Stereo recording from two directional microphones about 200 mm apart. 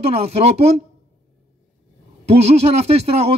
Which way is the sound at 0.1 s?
30° right (ahead or behind).